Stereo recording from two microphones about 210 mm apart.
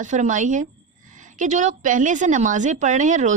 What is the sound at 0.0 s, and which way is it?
A woman's voice, 35° right (ahead or behind).